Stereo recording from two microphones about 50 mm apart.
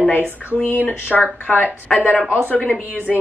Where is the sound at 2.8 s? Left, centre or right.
Right.